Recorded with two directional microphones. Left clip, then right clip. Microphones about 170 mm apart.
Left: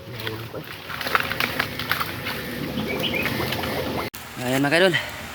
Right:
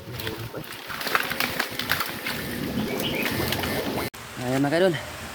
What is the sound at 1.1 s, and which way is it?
Horse, 30° left (ahead or behind).